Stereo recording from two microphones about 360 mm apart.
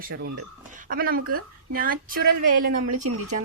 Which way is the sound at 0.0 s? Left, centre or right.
Right.